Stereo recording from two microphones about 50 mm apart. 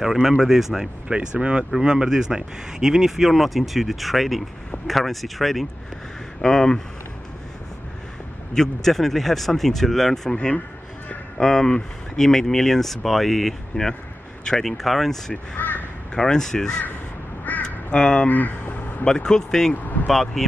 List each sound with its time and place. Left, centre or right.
0.0 s speech: centre
1.0 s speech: centre
8.5 s speech: centre
10.3 s a man's voice: left
11.3 s speech: centre
15.5 s crow: left
16.2 s speech: centre
17.6 s crow: centre
18.3 s vehicle: left
19.0 s speech: centre
19.7 s a sound: left
20.1 s speech: centre